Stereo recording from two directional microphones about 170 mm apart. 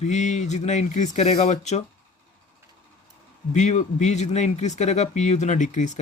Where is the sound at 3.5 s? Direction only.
45° left (ahead or behind).